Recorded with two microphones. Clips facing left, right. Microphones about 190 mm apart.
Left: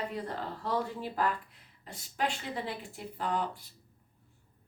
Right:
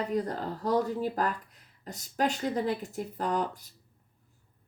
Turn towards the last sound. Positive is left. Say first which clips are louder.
# right 3 dB
turn(degrees=-45)  # may be behind; listen again after turning